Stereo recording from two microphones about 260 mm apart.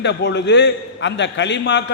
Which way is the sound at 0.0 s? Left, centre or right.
Left.